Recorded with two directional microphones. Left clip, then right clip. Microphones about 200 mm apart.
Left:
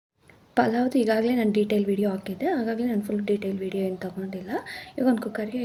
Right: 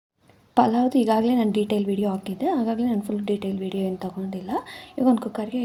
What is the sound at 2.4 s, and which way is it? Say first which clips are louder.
Speech: right 2 dB; 20° right (ahead or behind).